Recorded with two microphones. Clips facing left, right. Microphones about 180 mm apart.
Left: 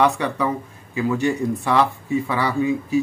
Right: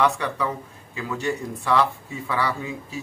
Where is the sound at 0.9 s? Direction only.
15° left (ahead or behind).